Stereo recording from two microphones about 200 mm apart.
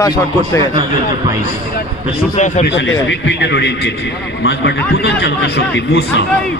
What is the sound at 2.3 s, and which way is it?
Speech, 35° left (ahead or behind).